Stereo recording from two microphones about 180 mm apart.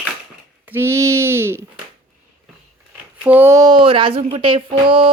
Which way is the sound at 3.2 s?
10° right (ahead or behind).